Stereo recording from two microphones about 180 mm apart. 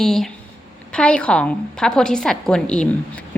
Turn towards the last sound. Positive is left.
turn(degrees=5)  # may be behind; listen again after turning